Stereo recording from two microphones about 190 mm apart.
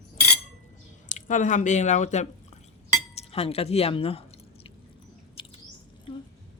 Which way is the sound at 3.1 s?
30° left (ahead or behind).